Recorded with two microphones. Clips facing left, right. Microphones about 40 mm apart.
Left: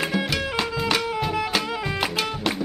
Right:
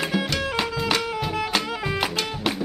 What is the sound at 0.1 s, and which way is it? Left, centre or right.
Music, centre.